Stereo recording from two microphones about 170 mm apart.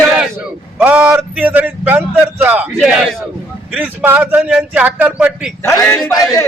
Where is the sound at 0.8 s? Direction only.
10° right (ahead or behind).